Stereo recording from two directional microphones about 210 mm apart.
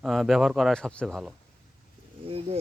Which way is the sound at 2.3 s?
30° right (ahead or behind).